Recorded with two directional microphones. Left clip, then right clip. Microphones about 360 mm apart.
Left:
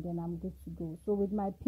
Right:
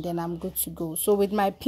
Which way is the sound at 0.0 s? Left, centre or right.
Centre.